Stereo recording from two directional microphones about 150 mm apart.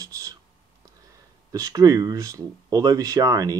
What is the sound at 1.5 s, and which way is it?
Speech, 25° right (ahead or behind).